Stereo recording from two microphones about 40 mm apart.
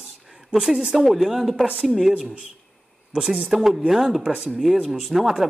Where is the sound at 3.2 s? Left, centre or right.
Centre.